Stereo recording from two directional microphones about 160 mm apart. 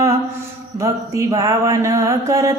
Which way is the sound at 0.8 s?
20° right (ahead or behind).